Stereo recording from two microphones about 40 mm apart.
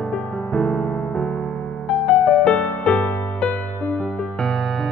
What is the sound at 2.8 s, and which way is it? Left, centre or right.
Music, left.